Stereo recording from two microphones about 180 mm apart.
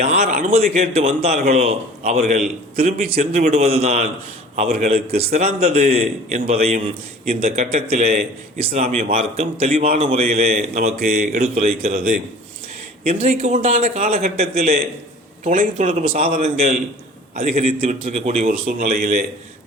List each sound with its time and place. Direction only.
0.0 s a man's voice: 40° right (ahead or behind)
14.1 s a man's voice: 35° right (ahead or behind)
15.4 s a man's voice: 45° right (ahead or behind)